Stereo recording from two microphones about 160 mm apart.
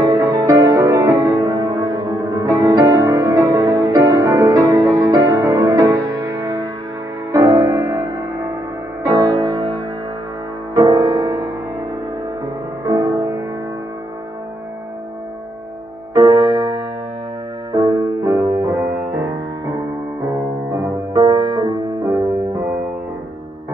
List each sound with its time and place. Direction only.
0.0 s music: 20° right (ahead or behind)
9.0 s music: 25° right (ahead or behind)
10.7 s music: 25° right (ahead or behind)
12.8 s music: 20° right (ahead or behind)
17.7 s music: 20° right (ahead or behind)
21.1 s music: 20° right (ahead or behind)